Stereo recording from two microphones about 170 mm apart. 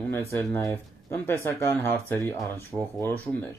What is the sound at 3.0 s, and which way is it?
Speech, 10° left (ahead or behind).